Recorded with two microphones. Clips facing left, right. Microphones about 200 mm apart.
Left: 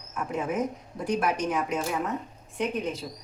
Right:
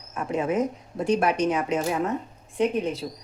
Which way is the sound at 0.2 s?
20° right (ahead or behind).